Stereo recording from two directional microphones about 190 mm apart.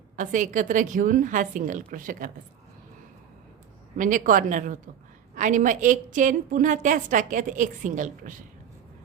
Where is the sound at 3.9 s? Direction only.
45° right (ahead or behind).